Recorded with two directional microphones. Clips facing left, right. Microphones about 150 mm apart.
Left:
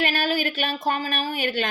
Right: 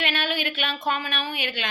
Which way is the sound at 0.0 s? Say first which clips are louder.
Left 4 dB; 40° left (ahead or behind).